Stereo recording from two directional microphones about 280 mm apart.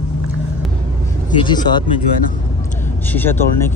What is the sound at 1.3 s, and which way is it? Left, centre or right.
Speech, centre.